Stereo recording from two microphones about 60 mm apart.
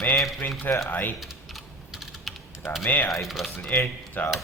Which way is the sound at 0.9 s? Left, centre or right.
Left.